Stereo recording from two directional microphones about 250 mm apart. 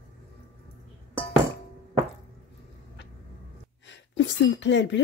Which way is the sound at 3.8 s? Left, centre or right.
Left.